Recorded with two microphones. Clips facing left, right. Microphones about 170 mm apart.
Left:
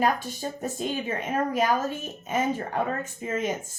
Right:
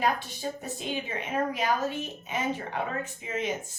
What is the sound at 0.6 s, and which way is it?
A woman's voice, 45° left (ahead or behind).